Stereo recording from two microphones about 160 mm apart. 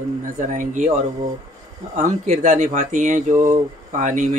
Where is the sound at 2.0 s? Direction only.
50° right (ahead or behind).